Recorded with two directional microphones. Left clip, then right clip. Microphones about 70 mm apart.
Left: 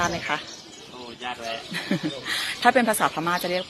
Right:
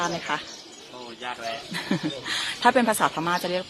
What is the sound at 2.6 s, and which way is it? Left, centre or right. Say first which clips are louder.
Speech: left 1 dB; right.